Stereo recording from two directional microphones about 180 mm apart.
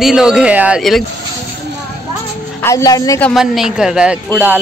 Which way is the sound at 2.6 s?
20° left (ahead or behind).